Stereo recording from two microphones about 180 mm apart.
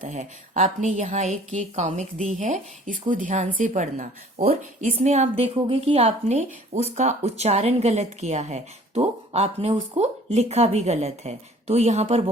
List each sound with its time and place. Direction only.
0.0 s a woman's voice: 40° right (ahead or behind)